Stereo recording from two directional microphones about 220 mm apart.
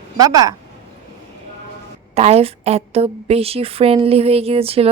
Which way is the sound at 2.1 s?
30° right (ahead or behind).